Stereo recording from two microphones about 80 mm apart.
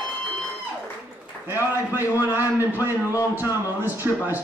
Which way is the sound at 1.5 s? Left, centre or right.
Right.